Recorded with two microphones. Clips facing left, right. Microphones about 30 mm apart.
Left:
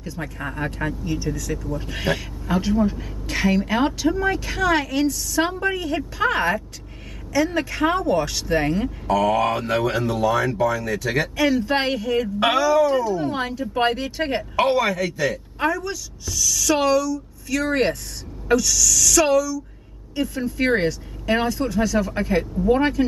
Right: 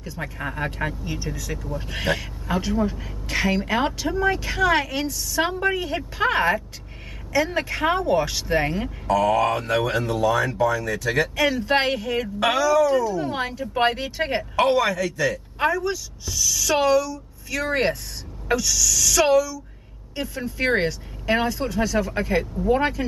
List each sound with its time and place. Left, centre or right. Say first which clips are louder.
0.0 s speech: even; centre
9.0 s speech: even; centre
12.4 s speech: left 1 dB; centre
13.3 s speech: left 1 dB; centre
14.7 s speech: even; centre
15.6 s speech: right 1 dB; centre